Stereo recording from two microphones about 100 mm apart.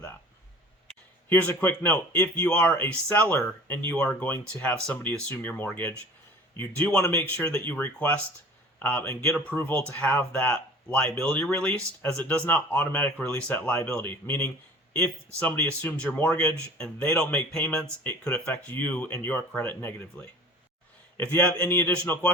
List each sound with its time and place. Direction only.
1.3 s speech: 20° left (ahead or behind)